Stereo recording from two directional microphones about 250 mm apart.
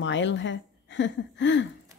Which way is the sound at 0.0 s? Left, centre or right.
Left.